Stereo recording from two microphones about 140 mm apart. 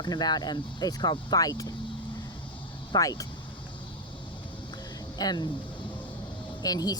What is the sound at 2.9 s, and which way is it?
Speech, 25° left (ahead or behind).